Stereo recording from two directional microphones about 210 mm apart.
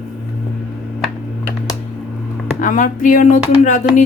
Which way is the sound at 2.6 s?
40° left (ahead or behind).